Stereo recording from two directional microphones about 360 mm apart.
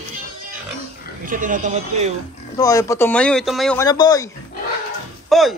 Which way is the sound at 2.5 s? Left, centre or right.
Centre.